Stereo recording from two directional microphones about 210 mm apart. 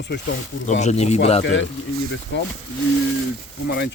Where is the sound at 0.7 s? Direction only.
30° left (ahead or behind).